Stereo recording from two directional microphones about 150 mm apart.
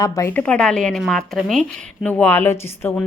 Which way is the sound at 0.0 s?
20° left (ahead or behind).